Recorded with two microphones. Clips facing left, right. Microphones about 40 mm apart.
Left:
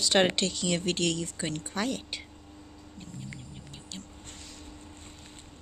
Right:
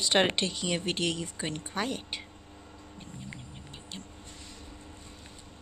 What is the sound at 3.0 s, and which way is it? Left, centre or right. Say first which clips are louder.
Bird: left 2 dB; right.